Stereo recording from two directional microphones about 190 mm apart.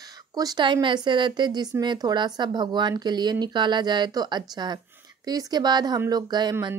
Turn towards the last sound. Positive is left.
turn(degrees=-20)  # may be behind; listen again after turning